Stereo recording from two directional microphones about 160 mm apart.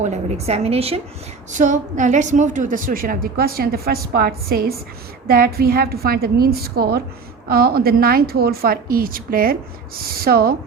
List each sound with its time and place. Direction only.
0.0 s a woman's voice: 45° right (ahead or behind)
1.5 s a woman's voice: 50° right (ahead or behind); by 10.5 s 70° right (ahead or behind)